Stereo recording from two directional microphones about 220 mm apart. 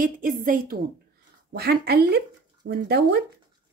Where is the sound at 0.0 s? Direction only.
40° right (ahead or behind).